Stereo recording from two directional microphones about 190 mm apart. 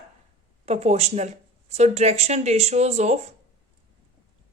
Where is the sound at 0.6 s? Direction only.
35° right (ahead or behind).